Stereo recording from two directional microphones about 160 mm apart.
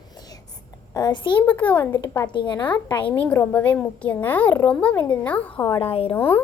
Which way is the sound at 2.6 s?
10° left (ahead or behind).